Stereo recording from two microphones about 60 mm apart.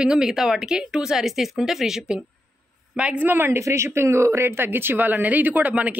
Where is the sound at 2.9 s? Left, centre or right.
Right.